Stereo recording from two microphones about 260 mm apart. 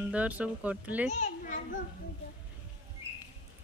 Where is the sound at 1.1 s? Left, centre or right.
Left.